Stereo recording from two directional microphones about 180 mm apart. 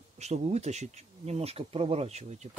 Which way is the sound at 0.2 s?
40° right (ahead or behind).